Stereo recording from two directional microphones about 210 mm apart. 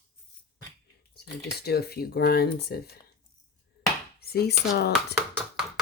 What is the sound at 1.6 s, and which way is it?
Speech, 50° left (ahead or behind).